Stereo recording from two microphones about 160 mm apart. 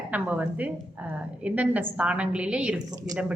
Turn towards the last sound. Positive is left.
turn(degrees=-25)  # may be behind; listen again after turning